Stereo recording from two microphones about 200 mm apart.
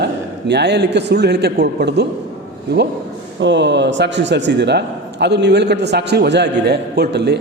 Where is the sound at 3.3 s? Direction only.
65° right (ahead or behind).